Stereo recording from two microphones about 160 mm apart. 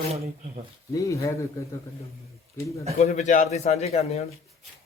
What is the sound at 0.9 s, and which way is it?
Speech, 20° left (ahead or behind).